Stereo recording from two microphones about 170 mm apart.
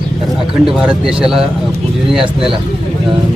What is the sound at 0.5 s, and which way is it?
Speech, 5° right (ahead or behind).